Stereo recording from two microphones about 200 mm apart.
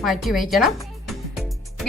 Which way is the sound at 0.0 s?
Centre (ahead or behind).